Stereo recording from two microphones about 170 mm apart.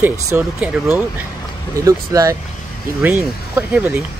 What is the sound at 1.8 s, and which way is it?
Speech, 20° right (ahead or behind).